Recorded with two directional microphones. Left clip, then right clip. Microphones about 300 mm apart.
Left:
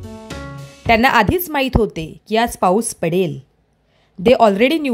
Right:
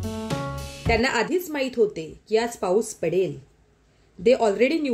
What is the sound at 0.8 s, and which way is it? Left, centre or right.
A woman's voice, left.